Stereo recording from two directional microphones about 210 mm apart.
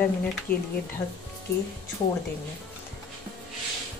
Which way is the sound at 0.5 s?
45° left (ahead or behind).